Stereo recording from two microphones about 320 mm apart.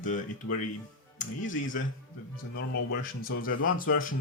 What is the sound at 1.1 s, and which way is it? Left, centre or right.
Speech, left.